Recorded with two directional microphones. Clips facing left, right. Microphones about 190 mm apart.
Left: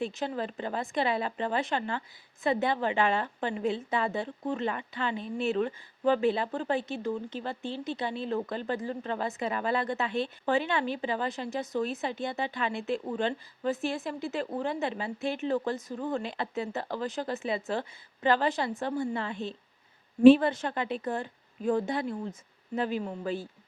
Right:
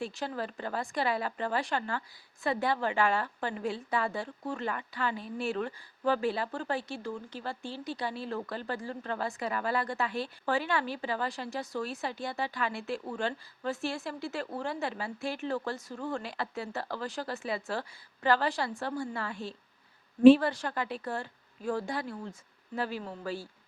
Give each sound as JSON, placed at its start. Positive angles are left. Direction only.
{"t": 0.0, "sound": "speech", "side_deg": 20}